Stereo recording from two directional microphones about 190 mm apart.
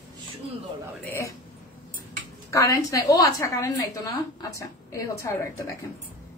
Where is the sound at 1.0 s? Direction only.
10° left (ahead or behind).